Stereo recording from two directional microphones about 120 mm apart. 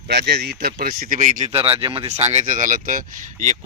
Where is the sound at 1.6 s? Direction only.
50° right (ahead or behind).